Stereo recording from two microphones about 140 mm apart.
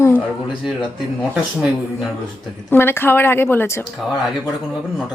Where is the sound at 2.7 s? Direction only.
15° left (ahead or behind).